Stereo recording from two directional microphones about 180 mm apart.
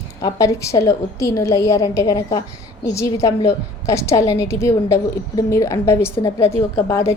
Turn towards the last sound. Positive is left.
turn(degrees=15)  # may be behind; listen again after turning